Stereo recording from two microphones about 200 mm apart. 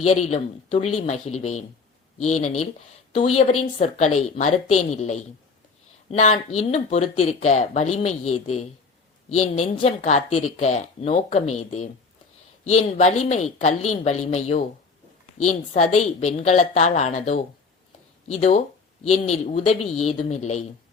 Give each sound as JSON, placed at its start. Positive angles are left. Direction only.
{"t": 0.0, "sound": "speech", "side_deg": 30}
{"t": 12.6, "sound": "speech", "side_deg": 35}